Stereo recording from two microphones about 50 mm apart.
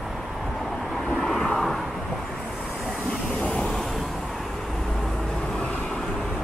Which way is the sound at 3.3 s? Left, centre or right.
Centre.